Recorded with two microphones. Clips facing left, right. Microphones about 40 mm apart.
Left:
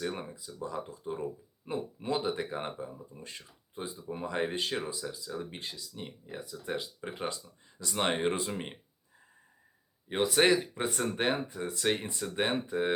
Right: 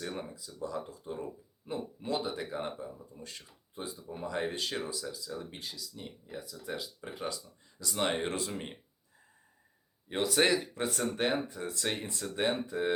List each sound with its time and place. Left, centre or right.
0.0 s speech: centre
5.5 s speech: left; by 8.8 s centre
10.1 s speech: centre